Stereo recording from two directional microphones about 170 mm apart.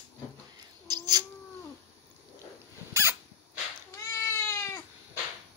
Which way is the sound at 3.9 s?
15° left (ahead or behind).